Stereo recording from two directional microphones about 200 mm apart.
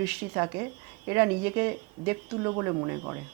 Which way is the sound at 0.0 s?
15° right (ahead or behind).